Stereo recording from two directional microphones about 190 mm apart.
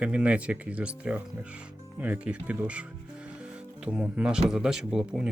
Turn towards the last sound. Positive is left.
turn(degrees=0)  # may be behind; listen again after turning